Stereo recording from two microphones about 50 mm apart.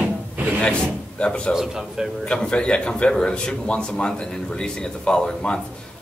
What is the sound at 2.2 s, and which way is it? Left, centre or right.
Speech, centre.